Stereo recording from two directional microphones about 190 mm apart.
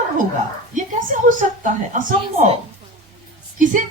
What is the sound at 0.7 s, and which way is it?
A woman's voice, 40° right (ahead or behind).